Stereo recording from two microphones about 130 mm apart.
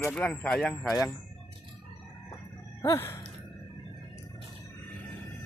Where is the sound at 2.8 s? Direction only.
20° left (ahead or behind).